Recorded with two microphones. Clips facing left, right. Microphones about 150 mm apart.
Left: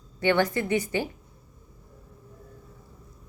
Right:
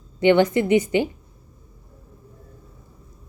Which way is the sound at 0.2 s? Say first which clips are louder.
Right 7 dB; 20° right (ahead or behind).